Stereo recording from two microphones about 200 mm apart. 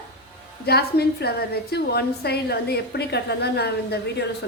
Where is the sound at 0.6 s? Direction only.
50° left (ahead or behind).